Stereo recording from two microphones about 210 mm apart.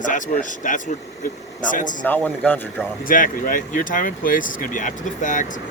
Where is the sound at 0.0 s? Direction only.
40° left (ahead or behind).